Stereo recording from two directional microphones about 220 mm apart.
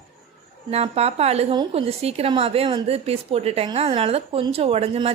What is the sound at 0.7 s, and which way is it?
A woman's voice, 30° right (ahead or behind).